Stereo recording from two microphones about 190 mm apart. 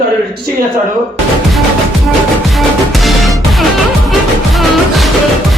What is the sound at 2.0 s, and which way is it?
Music, centre (ahead or behind).